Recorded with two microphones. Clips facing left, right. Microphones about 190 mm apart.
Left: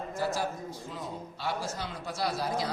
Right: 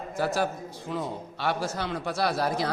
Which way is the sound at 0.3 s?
70° right (ahead or behind).